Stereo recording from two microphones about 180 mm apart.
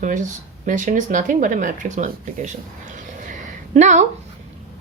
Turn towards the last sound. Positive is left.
turn(degrees=-40)  # may be behind; listen again after turning